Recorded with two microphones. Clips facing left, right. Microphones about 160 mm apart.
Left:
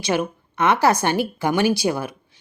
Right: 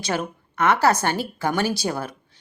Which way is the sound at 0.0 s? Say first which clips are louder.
Left 4 dB; 15° left (ahead or behind).